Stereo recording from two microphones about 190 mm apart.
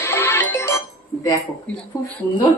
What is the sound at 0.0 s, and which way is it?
Music, 10° left (ahead or behind).